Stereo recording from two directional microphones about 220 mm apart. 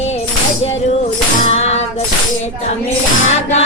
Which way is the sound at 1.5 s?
30° left (ahead or behind).